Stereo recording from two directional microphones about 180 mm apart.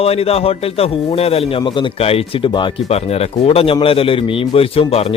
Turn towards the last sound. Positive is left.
turn(degrees=30)  # may be behind; listen again after turning